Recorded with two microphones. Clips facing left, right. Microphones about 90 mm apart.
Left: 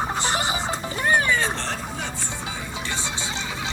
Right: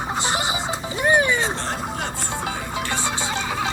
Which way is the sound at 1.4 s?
30° right (ahead or behind).